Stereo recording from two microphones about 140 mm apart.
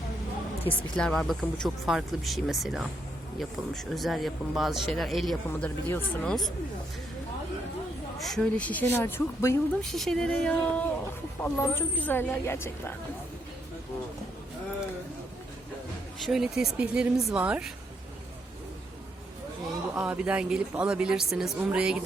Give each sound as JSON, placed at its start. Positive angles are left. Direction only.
{"t": 0.7, "sound": "speech", "side_deg": 5}
{"t": 8.2, "sound": "speech", "side_deg": 5}
{"t": 9.8, "sound": "speech", "side_deg": 0}
{"t": 16.2, "sound": "speech", "side_deg": -5}
{"t": 20.0, "sound": "speech", "side_deg": -10}